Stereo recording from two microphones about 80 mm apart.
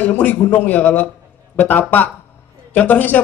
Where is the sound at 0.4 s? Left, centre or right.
Left.